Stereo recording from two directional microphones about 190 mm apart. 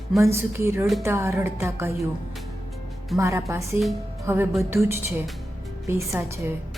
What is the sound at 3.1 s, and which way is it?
Speech, 15° right (ahead or behind).